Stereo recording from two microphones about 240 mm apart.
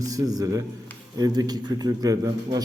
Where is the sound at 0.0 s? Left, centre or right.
Centre.